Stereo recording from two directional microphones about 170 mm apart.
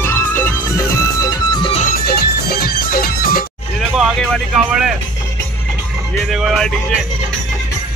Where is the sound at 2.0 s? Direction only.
60° left (ahead or behind).